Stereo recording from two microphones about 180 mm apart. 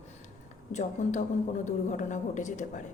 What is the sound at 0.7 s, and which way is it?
A woman's voice, 45° left (ahead or behind).